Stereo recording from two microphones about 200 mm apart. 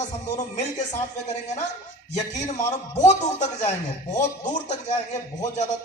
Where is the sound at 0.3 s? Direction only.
35° left (ahead or behind).